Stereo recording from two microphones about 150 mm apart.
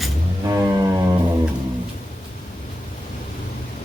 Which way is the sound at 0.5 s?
20° right (ahead or behind).